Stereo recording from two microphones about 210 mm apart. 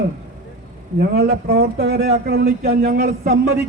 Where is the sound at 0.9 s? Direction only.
50° right (ahead or behind).